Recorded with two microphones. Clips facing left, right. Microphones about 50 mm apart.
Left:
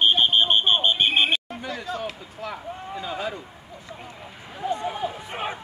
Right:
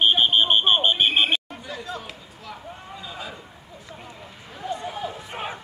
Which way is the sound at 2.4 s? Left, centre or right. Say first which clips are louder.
Left 6 dB; left.